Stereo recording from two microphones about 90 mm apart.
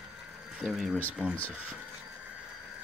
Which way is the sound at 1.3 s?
15° left (ahead or behind).